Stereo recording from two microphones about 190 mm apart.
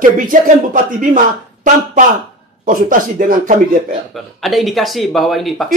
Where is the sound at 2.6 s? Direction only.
45° right (ahead or behind).